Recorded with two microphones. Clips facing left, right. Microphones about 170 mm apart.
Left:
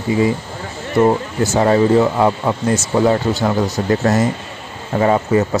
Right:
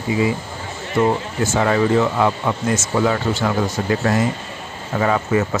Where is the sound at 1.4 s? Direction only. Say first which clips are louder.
Left 4 dB; 35° left (ahead or behind).